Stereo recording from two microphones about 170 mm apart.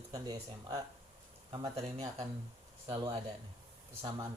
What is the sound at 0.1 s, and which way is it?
Speech, 20° right (ahead or behind).